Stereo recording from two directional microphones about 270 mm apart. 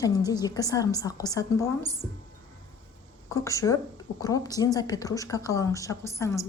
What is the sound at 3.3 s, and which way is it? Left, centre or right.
A woman's voice, centre.